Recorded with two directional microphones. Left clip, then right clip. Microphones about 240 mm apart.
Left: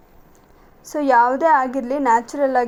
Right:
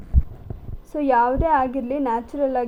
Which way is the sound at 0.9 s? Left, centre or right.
Left.